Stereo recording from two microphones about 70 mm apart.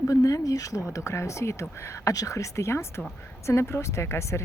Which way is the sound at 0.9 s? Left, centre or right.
Left.